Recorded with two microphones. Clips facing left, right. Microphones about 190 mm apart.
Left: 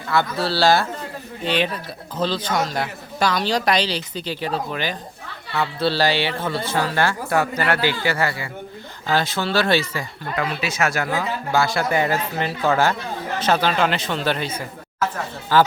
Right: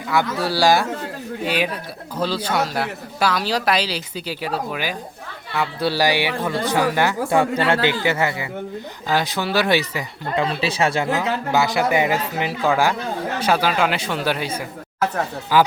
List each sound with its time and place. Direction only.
0.1 s a woman's voice: 15° right (ahead or behind)
15.5 s a woman's voice: 10° right (ahead or behind)